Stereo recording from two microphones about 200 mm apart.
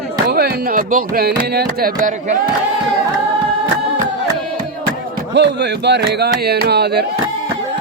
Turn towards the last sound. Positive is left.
turn(degrees=-55)  # may be behind; listen again after turning